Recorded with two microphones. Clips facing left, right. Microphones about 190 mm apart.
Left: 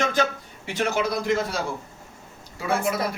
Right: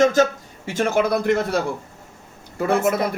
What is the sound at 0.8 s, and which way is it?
Speech, 50° right (ahead or behind).